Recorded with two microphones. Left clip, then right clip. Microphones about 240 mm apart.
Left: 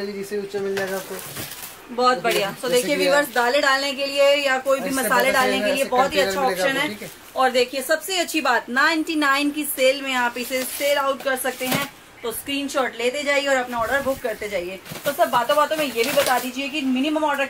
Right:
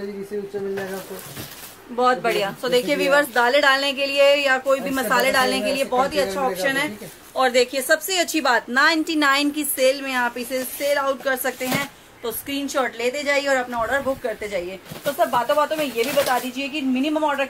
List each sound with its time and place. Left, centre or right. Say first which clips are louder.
0.7 s a woman's voice: left 4 dB; centre
2.0 s a woman's voice: even; centre
6.2 s a woman's voice: left 2 dB; centre
6.6 s a woman's voice: left 1 dB; centre